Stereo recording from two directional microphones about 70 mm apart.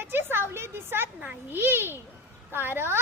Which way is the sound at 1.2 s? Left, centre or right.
Right.